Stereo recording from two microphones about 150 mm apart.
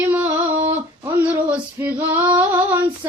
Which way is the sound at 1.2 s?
10° right (ahead or behind).